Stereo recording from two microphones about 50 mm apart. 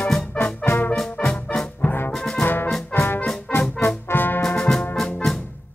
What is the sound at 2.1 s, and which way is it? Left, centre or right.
Music, centre.